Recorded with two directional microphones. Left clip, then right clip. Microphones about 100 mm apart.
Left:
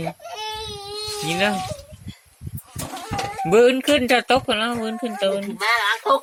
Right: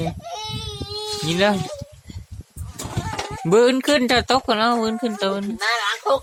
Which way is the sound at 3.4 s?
65° right (ahead or behind).